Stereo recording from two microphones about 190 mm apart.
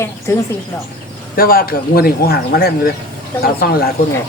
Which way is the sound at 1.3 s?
50° left (ahead or behind).